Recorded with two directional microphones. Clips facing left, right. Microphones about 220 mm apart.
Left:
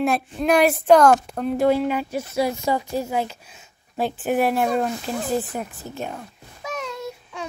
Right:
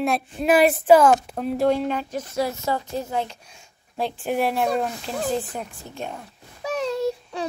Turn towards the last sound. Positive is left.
turn(degrees=-35)  # may be behind; listen again after turning